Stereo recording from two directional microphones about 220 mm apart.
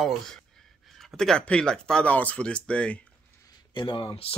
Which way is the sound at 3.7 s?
20° left (ahead or behind).